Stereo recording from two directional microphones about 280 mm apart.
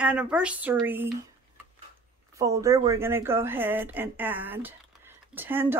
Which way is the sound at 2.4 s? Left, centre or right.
Centre.